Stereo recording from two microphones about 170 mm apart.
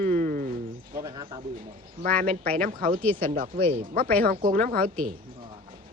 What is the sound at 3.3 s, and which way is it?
A woman's voice, 55° right (ahead or behind).